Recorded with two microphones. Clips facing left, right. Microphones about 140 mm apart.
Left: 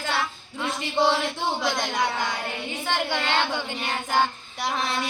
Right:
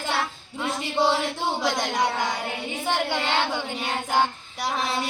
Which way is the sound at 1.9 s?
15° right (ahead or behind).